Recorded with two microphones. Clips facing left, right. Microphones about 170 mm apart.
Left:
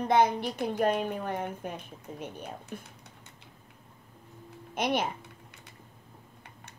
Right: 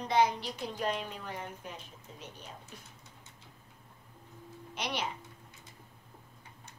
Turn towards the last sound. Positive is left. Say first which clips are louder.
# left 3 dB
turn(degrees=50)  # may be behind; listen again after turning